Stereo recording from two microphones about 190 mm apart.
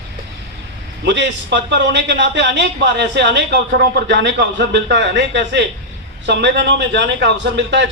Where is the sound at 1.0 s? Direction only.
65° right (ahead or behind).